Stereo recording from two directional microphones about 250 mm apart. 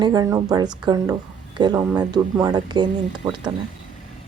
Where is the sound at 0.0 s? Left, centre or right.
Centre.